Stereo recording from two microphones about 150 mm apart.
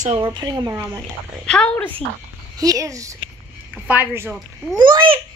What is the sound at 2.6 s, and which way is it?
Speech, 20° right (ahead or behind).